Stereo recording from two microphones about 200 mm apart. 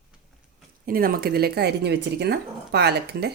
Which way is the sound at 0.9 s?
45° right (ahead or behind).